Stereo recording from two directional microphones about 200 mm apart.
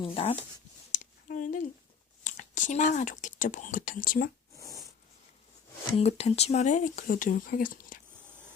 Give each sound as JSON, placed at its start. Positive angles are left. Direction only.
{"t": 0.0, "sound": "speech", "side_deg": 30}
{"t": 0.9, "sound": "a sound", "side_deg": 40}
{"t": 2.2, "sound": "speech", "side_deg": 40}
{"t": 6.0, "sound": "speech", "side_deg": 30}